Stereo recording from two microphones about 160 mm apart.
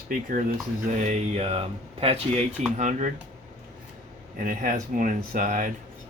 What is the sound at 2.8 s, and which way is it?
Speech, 50° right (ahead or behind).